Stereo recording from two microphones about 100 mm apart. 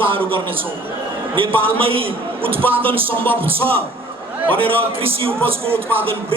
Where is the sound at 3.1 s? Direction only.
20° left (ahead or behind).